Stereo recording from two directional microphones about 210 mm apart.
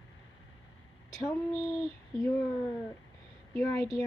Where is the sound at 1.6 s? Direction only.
Centre (ahead or behind).